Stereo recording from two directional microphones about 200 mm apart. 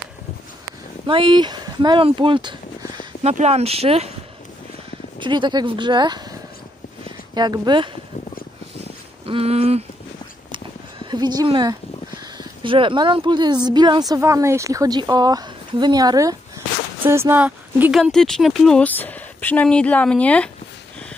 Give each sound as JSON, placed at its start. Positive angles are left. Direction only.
{"t": 1.0, "sound": "speech", "side_deg": -25}
{"t": 3.3, "sound": "speech", "side_deg": -30}
{"t": 5.2, "sound": "speech", "side_deg": -25}
{"t": 7.3, "sound": "speech", "side_deg": -20}
{"t": 8.7, "sound": "a sound", "side_deg": -30}
{"t": 11.1, "sound": "speech", "side_deg": -20}